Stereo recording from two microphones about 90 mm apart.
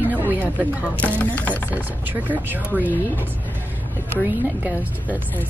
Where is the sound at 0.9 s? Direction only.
15° left (ahead or behind).